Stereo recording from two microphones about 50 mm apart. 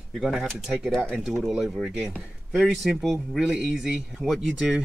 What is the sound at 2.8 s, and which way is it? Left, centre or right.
Speech, centre.